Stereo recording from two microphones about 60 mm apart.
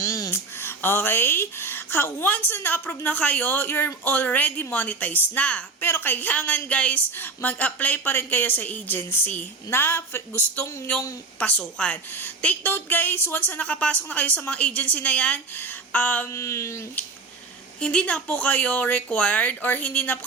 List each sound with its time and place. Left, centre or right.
0.0 s a sound: left
0.6 s a woman's voice: left
2.2 s a woman's voice: left
5.8 s a woman's voice: left
10.5 s speech: left
12.6 s speech: left
15.5 s a sound: left
16.3 s a sound: left
17.7 s speech: left